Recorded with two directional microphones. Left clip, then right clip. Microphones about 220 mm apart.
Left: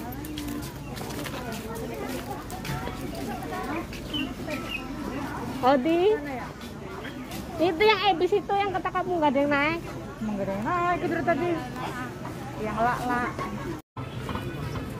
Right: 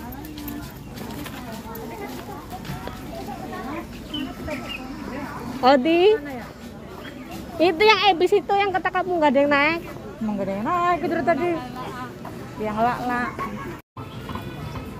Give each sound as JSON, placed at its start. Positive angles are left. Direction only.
{"t": 5.6, "sound": "speech", "side_deg": -30}
{"t": 7.6, "sound": "speech", "side_deg": -20}
{"t": 10.6, "sound": "speech", "side_deg": -40}
{"t": 12.6, "sound": "speech", "side_deg": -40}